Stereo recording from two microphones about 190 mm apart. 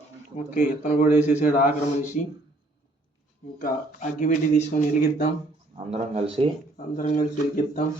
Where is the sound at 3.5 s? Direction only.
45° left (ahead or behind).